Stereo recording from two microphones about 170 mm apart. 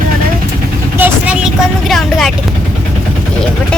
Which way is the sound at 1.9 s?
Centre (ahead or behind).